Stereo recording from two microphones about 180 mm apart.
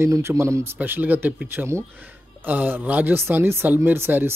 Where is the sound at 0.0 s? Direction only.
15° right (ahead or behind).